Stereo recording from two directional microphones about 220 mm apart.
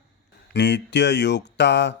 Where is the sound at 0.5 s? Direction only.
50° left (ahead or behind).